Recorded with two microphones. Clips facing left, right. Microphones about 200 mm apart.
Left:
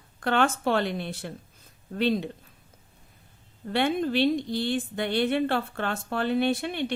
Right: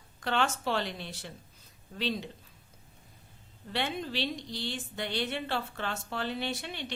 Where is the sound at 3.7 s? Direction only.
55° left (ahead or behind).